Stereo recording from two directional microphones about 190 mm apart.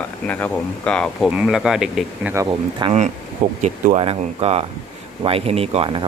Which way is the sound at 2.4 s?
30° right (ahead or behind).